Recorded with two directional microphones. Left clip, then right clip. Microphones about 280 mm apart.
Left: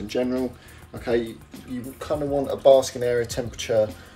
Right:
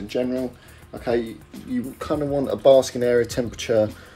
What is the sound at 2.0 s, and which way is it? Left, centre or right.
Speech, right.